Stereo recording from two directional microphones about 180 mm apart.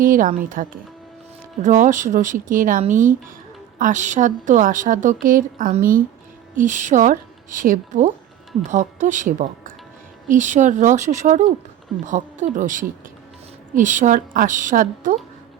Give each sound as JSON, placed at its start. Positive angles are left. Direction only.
{"t": 0.0, "sound": "a woman's voice", "side_deg": -50}